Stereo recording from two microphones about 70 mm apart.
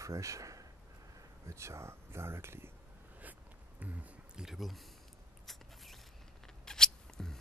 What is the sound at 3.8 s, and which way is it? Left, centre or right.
Speech, right.